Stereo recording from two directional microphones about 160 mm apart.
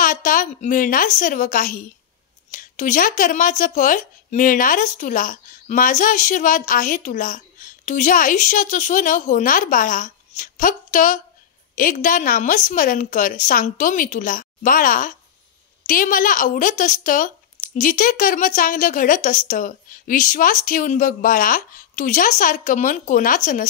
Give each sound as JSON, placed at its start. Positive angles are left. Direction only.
{"t": 0.0, "sound": "speech", "side_deg": 55}